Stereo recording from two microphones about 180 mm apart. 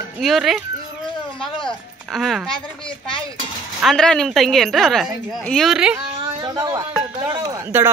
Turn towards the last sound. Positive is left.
turn(degrees=-20)  # may be behind; listen again after turning